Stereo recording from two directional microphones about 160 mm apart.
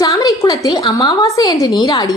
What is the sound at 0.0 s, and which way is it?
A woman's voice, 20° left (ahead or behind).